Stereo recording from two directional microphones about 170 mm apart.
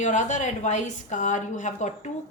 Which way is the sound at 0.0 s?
45° left (ahead or behind).